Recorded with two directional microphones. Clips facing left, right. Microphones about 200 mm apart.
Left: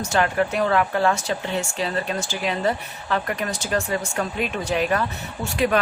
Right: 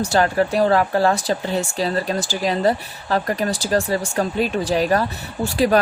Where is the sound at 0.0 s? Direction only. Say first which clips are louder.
Right 3 dB; 35° right (ahead or behind).